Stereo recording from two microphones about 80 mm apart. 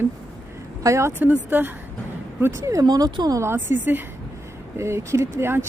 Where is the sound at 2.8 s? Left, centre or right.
Right.